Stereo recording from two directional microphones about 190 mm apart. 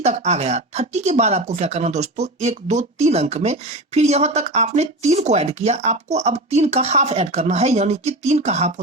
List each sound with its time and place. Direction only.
0.0 s speech: 35° right (ahead or behind)